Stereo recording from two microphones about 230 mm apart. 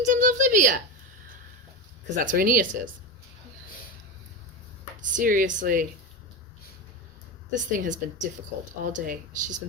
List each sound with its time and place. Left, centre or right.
0.0 s a sound: right
2.1 s speech: right
5.1 s speech: right
7.5 s speech: right